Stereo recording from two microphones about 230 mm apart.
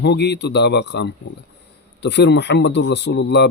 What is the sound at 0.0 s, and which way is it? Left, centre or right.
A man's voice, left.